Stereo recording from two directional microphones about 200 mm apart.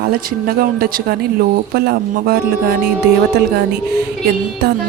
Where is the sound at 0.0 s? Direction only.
45° right (ahead or behind).